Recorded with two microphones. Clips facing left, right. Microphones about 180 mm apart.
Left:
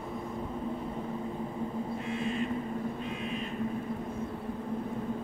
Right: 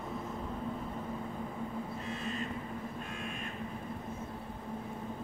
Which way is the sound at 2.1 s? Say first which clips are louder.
Left 7 dB; 40° right (ahead or behind).